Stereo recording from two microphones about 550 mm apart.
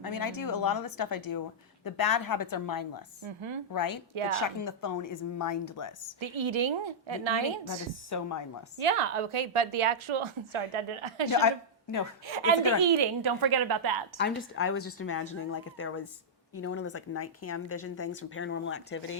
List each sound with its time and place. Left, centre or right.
0.0 s a woman's voice: left
3.2 s a woman's voice: right
3.7 s a woman's voice: left
6.1 s a woman's voice: right
7.7 s a woman's voice: left
8.8 s a woman's voice: right
11.3 s a woman's voice: left
13.0 s a woman's voice: right
14.2 s a woman's voice: centre